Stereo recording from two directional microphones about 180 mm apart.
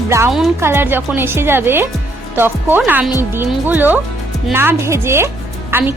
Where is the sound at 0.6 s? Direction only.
15° right (ahead or behind).